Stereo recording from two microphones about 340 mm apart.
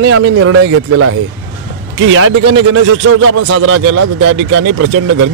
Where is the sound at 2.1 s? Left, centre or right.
Right.